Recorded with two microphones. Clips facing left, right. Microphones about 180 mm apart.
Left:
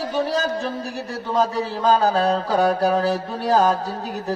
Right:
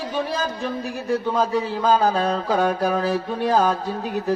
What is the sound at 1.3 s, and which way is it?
Speech, 40° left (ahead or behind).